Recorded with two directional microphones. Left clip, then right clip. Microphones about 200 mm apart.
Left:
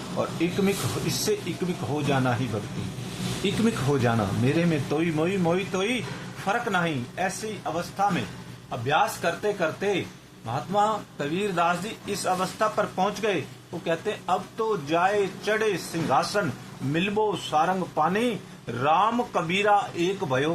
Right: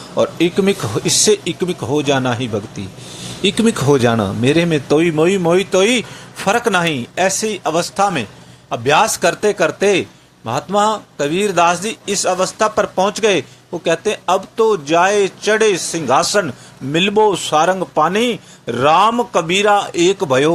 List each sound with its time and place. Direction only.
0.2 s a man's voice: 30° right (ahead or behind)
3.4 s a man's voice: 30° right (ahead or behind)